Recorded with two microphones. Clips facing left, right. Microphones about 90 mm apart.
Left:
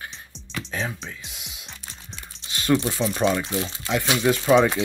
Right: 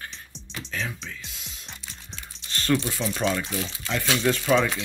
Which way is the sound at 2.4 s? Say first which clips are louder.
Left 3 dB; 10° left (ahead or behind).